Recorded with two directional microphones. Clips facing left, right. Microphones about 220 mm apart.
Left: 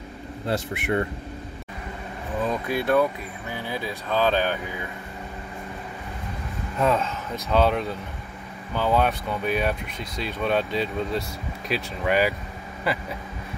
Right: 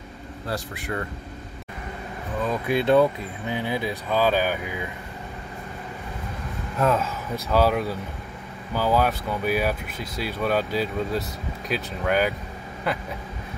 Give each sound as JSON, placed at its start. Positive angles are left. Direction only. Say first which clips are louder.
{"t": 0.5, "sound": "speech", "louder": "left 5 dB", "side_deg": 25}
{"t": 2.7, "sound": "speech", "louder": "right 4 dB", "side_deg": -25}
{"t": 6.8, "sound": "speech", "louder": "even", "side_deg": -5}